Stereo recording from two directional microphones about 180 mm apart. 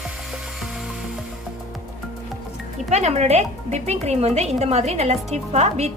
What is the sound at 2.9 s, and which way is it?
A woman's voice, 40° right (ahead or behind).